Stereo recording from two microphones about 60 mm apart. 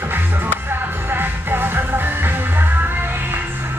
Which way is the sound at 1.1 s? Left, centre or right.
Right.